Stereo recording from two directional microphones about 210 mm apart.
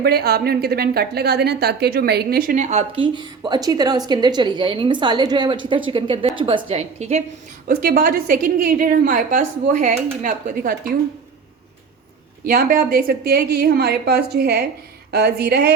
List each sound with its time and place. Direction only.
0.0 s a woman's voice: 50° right (ahead or behind); by 7.3 s 30° right (ahead or behind)
7.7 s a woman's voice: 45° right (ahead or behind)
12.5 s a woman's voice: 45° right (ahead or behind)